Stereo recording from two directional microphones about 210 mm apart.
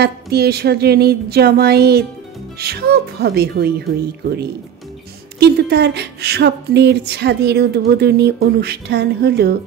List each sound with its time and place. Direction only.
0.0 s speech: 50° right (ahead or behind)